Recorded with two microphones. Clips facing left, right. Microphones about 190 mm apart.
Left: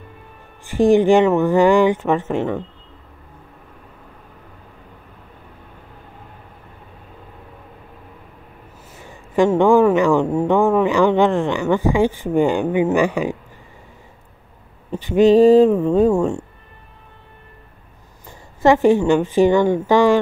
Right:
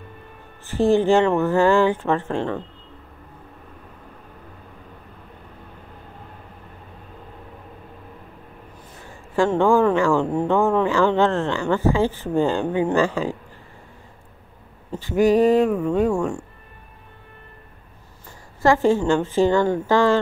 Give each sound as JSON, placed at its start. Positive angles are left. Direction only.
{"t": 0.7, "sound": "speech", "side_deg": 15}
{"t": 9.1, "sound": "speech", "side_deg": 15}
{"t": 14.9, "sound": "speech", "side_deg": 20}
{"t": 18.6, "sound": "speech", "side_deg": 20}